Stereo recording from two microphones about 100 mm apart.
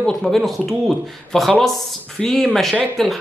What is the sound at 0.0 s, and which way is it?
Speech, 5° left (ahead or behind).